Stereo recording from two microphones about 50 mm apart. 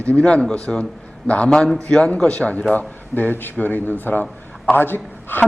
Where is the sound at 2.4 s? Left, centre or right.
Left.